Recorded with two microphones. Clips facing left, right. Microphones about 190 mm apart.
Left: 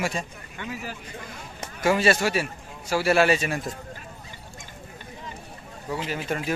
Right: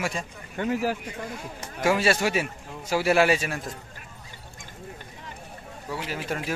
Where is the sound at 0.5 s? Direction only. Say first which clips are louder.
Right 9 dB; 45° right (ahead or behind).